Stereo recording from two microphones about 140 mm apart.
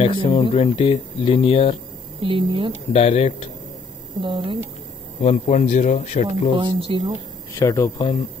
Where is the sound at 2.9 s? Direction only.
50° left (ahead or behind).